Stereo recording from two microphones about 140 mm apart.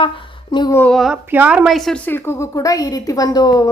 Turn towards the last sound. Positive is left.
turn(degrees=30)  # may be behind; listen again after turning